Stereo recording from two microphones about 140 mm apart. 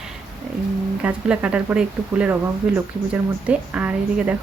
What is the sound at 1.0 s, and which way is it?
A woman's voice, 10° right (ahead or behind).